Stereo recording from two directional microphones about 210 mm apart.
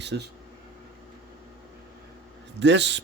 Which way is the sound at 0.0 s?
55° right (ahead or behind).